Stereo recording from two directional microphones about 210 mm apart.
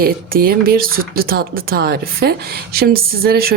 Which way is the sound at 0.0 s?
45° right (ahead or behind).